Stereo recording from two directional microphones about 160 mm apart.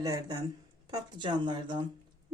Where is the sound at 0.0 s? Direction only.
25° right (ahead or behind).